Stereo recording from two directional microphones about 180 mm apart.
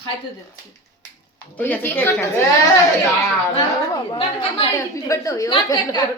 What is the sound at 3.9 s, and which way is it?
Speech, 30° left (ahead or behind).